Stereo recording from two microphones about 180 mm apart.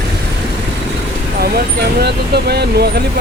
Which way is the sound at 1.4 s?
60° right (ahead or behind).